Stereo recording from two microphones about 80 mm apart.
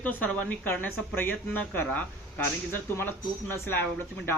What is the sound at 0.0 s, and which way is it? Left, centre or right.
Speech, left.